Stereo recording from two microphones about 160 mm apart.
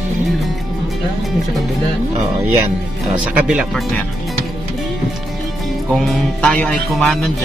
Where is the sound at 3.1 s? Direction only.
5° right (ahead or behind).